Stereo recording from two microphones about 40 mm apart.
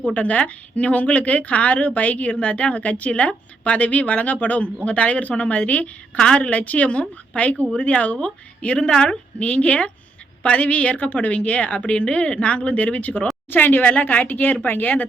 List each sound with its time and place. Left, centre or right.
0.0 s a woman's voice: left
6.1 s a woman's voice: left
6.5 s a woman's voice: left
9.4 s a woman's voice: left
13.5 s speech: left